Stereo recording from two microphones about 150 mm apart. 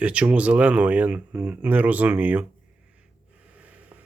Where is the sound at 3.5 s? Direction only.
10° right (ahead or behind).